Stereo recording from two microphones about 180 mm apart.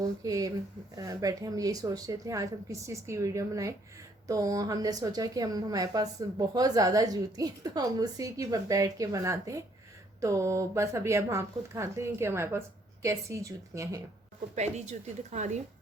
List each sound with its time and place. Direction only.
0.0 s a woman's voice: 20° right (ahead or behind)
14.5 s speech: 40° right (ahead or behind)